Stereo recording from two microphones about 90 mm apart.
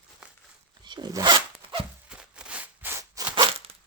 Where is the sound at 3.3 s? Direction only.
70° right (ahead or behind).